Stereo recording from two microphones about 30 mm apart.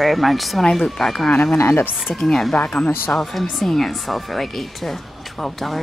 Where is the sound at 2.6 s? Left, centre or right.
Left.